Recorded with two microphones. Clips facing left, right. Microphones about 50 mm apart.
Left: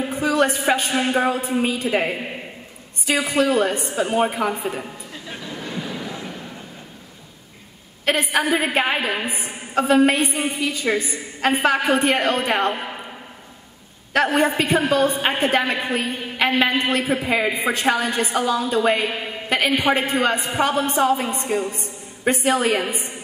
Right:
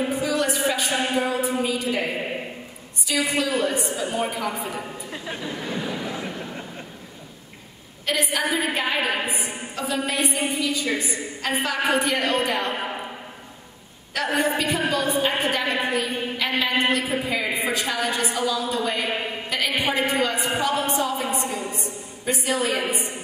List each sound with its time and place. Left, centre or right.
0.1 s a sound: left
0.7 s a woman's voice: left
5.3 s a sound: centre
8.0 s a woman's voice: left
12.7 s a man's voice: centre
14.1 s a woman's voice: left